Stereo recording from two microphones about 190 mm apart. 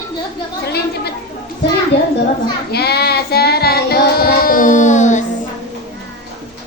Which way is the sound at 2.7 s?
55° left (ahead or behind).